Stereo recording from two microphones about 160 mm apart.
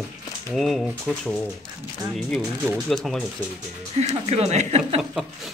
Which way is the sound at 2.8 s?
Centre (ahead or behind).